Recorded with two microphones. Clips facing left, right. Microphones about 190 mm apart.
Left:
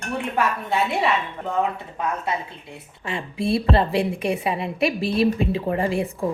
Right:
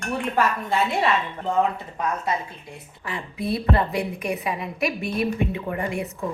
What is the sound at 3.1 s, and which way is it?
A woman's voice, 25° left (ahead or behind).